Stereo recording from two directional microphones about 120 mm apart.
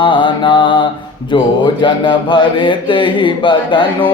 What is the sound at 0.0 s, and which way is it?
Mantra, 45° left (ahead or behind).